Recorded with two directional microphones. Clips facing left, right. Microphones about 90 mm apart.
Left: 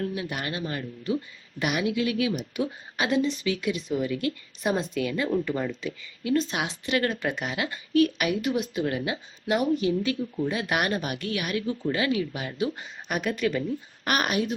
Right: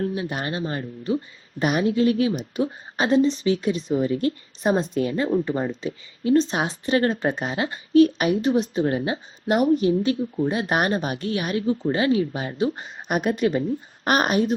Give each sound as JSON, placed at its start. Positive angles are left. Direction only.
{"t": 0.0, "sound": "speech", "side_deg": -30}